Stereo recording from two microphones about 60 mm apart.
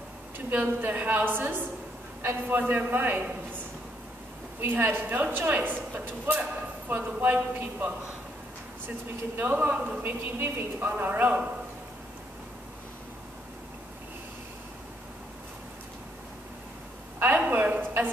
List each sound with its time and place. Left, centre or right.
0.5 s a man's voice: right
9.4 s a man's voice: right
17.5 s a sound: right